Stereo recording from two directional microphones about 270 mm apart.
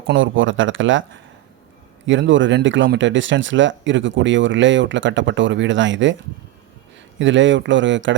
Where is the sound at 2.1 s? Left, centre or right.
Right.